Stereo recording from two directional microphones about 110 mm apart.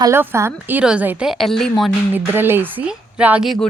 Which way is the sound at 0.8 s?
10° right (ahead or behind).